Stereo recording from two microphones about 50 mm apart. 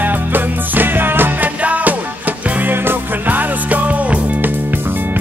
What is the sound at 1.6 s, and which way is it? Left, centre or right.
Music, right.